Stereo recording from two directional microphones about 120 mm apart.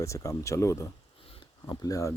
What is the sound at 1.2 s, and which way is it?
Sniff, 50° left (ahead or behind).